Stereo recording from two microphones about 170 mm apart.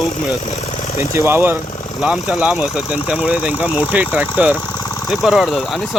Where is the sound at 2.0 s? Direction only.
5° right (ahead or behind).